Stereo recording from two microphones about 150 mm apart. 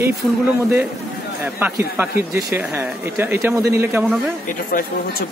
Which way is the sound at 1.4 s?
10° right (ahead or behind).